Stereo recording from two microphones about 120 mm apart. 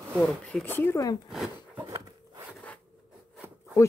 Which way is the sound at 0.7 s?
20° left (ahead or behind).